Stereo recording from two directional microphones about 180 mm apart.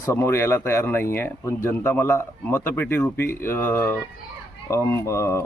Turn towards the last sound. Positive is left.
turn(degrees=15)  # may be behind; listen again after turning